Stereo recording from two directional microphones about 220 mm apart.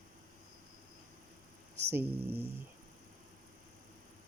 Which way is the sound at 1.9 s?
10° right (ahead or behind).